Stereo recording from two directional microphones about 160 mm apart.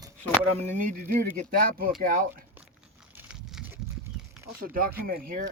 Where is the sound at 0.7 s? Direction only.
55° right (ahead or behind).